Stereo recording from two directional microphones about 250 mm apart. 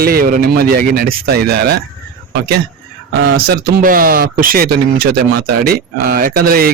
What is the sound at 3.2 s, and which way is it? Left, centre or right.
Speech, right.